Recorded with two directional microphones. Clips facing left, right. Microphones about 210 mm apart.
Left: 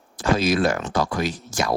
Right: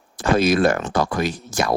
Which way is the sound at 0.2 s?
55° right (ahead or behind).